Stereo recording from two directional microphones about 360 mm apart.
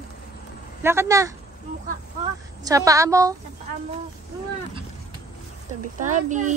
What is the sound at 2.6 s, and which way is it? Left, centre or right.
Speech, centre.